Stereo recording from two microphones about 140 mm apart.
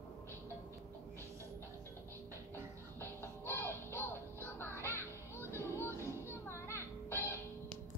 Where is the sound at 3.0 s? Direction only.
15° left (ahead or behind).